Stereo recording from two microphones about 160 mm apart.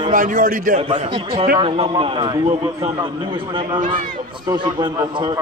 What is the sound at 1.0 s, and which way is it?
A man's voice, 30° right (ahead or behind).